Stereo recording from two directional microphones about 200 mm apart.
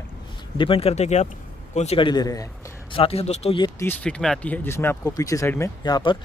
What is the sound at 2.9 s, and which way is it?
Speech, 30° left (ahead or behind).